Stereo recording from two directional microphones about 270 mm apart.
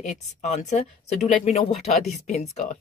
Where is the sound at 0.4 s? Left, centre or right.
Left.